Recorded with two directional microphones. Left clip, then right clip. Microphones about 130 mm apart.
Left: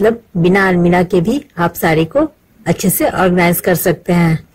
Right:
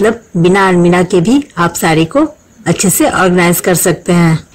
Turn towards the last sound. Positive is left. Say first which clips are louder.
# right 3 dB
turn(degrees=-20)  # may be behind; listen again after turning